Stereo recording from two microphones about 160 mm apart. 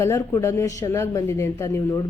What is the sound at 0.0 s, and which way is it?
A woman's voice, 20° left (ahead or behind).